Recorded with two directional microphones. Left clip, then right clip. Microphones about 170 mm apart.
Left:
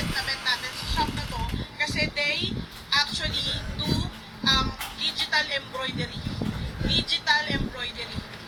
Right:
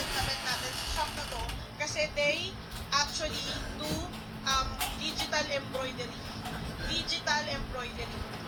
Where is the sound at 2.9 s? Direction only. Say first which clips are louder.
Left 6 dB; 40° left (ahead or behind).